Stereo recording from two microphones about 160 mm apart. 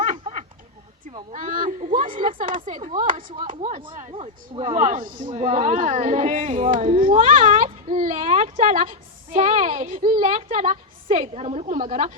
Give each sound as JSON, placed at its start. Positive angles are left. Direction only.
{"t": 0.0, "sound": "a sound", "side_deg": -50}
{"t": 2.2, "sound": "speech", "side_deg": -60}
{"t": 3.2, "sound": "speech", "side_deg": -30}
{"t": 4.7, "sound": "a woman's voice", "side_deg": -50}
{"t": 6.7, "sound": "speech", "side_deg": -40}
{"t": 7.0, "sound": "a woman's voice", "side_deg": -55}